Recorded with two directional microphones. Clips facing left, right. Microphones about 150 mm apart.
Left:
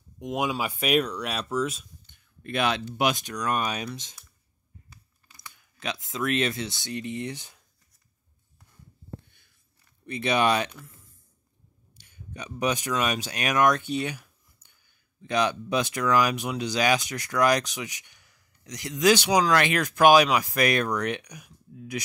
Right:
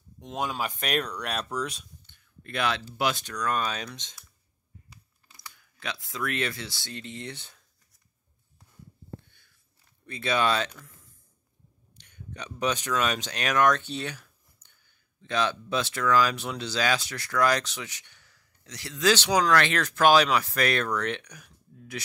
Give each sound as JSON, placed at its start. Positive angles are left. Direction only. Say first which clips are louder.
{"t": 0.2, "sound": "speech", "louder": "left 3 dB", "side_deg": 10}
{"t": 2.0, "sound": "speech", "louder": "left 9 dB", "side_deg": 20}
{"t": 5.4, "sound": "speech", "louder": "left 3 dB", "side_deg": 20}
{"t": 10.0, "sound": "speech", "louder": "left 2 dB", "side_deg": 20}
{"t": 11.9, "sound": "speech", "louder": "even", "side_deg": 5}